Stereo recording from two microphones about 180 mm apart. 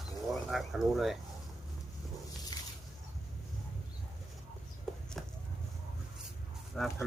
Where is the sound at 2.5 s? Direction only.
20° left (ahead or behind).